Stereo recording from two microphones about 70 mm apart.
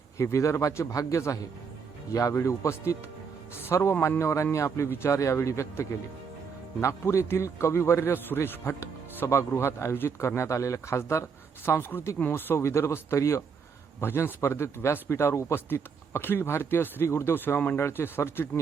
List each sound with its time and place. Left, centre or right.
0.2 s speech: left
14.0 s speech: left